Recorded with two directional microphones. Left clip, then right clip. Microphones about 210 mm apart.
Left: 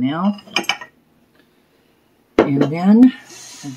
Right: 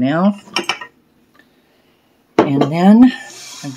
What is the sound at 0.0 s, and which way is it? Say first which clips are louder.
Speech: right 5 dB; 40° right (ahead or behind).